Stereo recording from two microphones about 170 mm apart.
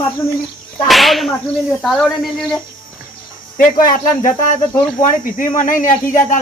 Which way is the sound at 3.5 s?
50° left (ahead or behind).